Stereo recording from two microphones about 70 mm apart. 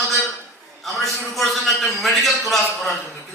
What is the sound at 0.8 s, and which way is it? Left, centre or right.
A man's voice, centre.